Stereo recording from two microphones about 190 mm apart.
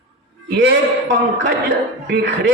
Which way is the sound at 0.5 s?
65° right (ahead or behind).